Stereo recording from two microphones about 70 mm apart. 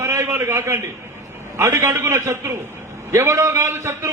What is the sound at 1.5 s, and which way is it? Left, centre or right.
A man's voice, right.